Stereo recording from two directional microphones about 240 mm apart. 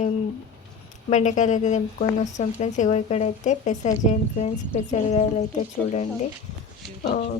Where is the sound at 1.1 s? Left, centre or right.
Left.